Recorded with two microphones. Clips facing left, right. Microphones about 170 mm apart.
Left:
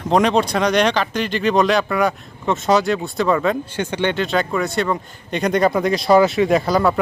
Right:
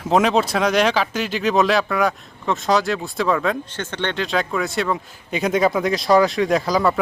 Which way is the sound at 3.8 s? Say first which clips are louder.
Left 5 dB; 10° left (ahead or behind).